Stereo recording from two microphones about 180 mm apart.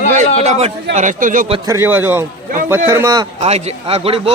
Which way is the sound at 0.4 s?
35° right (ahead or behind).